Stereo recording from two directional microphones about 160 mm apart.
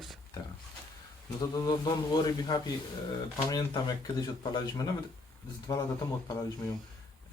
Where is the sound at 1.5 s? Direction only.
25° left (ahead or behind).